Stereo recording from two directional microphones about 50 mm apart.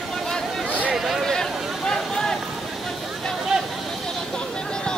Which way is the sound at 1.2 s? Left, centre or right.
Centre.